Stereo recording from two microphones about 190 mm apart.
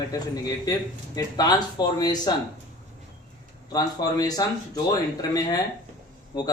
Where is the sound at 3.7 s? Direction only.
20° left (ahead or behind).